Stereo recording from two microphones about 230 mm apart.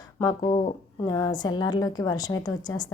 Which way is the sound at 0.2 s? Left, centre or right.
Centre.